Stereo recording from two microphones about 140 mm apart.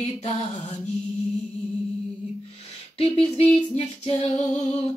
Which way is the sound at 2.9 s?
45° left (ahead or behind).